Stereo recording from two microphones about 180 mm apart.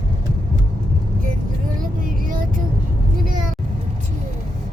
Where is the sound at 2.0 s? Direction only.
50° right (ahead or behind).